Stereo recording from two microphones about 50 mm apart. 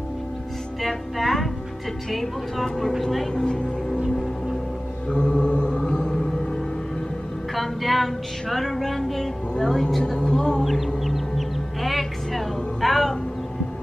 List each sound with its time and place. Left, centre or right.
0.8 s music: centre
2.0 s a woman's voice: centre
2.9 s a sound: centre
3.3 s speech: centre
5.1 s mantra: centre
7.5 s a sound: centre
10.1 s a woman's voice: centre
10.6 s a sound: centre
11.1 s music: centre